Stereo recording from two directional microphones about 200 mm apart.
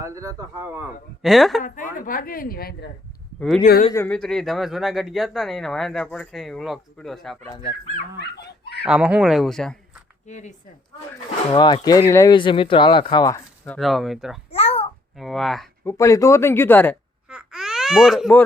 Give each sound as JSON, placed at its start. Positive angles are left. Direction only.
{"t": 0.0, "sound": "a man's voice", "side_deg": -15}
{"t": 1.2, "sound": "speech", "side_deg": 0}
{"t": 1.6, "sound": "a woman's voice", "side_deg": 40}
{"t": 3.9, "sound": "speech", "side_deg": 5}
{"t": 7.6, "sound": "speech", "side_deg": 30}
{"t": 8.2, "sound": "dog", "side_deg": 55}
{"t": 8.8, "sound": "speech", "side_deg": -5}
{"t": 10.2, "sound": "speech", "side_deg": 35}
{"t": 11.5, "sound": "speech", "side_deg": 20}
{"t": 13.7, "sound": "speech", "side_deg": 0}
{"t": 14.5, "sound": "babbling", "side_deg": 30}
{"t": 15.1, "sound": "speech", "side_deg": 0}
{"t": 15.9, "sound": "speech", "side_deg": 15}
{"t": 17.2, "sound": "babbling", "side_deg": -5}